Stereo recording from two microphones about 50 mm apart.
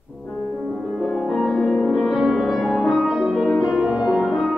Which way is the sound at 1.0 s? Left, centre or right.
Centre.